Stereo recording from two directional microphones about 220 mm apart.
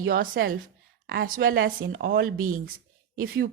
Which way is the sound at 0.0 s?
40° right (ahead or behind).